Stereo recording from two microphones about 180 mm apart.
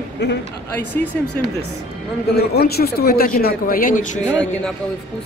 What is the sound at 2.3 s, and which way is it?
Speech, 60° left (ahead or behind).